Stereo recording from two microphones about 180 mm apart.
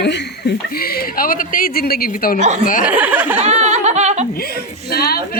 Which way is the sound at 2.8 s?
10° right (ahead or behind).